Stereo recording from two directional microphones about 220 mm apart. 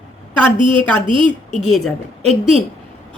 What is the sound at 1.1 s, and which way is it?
Speech, 20° right (ahead or behind).